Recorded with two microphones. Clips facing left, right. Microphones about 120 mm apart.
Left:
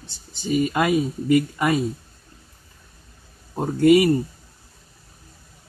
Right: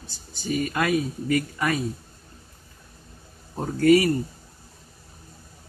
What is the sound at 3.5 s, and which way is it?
Speech, 20° left (ahead or behind).